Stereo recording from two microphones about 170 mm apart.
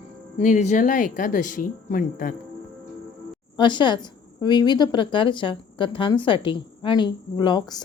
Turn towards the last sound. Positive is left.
turn(degrees=25)  # may be behind; listen again after turning